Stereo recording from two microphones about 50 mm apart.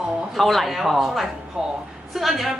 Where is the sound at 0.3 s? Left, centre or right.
Centre.